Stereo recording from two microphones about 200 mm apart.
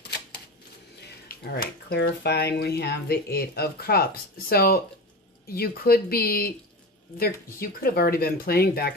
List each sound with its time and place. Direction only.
1.3 s speech: 50° left (ahead or behind)